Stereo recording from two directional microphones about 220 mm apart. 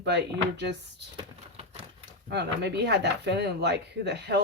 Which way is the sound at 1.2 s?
25° right (ahead or behind).